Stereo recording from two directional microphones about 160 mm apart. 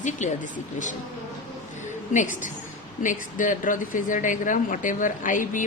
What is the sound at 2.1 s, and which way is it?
Speech, 50° left (ahead or behind).